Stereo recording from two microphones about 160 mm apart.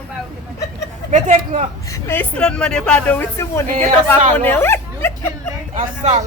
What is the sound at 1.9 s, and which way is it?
Speech, 15° left (ahead or behind).